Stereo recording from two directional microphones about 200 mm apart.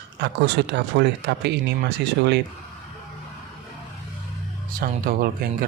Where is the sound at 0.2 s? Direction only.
60° right (ahead or behind).